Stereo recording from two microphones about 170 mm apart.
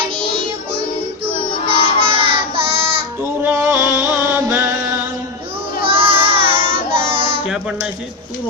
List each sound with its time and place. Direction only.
0.3 s music: 30° right (ahead or behind)
1.2 s child singing: 30° right (ahead or behind)
3.4 s music: 15° right (ahead or behind)
5.8 s child singing: 35° right (ahead or behind)